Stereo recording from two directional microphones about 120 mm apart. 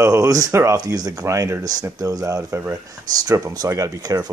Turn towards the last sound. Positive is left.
turn(degrees=-30)  # may be behind; listen again after turning